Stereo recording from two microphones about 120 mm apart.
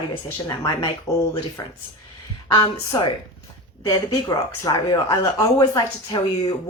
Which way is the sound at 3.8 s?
35° left (ahead or behind).